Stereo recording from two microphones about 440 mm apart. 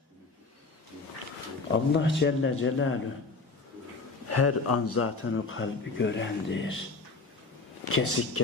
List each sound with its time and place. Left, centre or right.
1.7 s speech: left
4.3 s speech: left
7.9 s speech: left